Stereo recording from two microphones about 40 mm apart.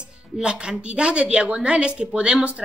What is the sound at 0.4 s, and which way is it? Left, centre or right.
Speech, right.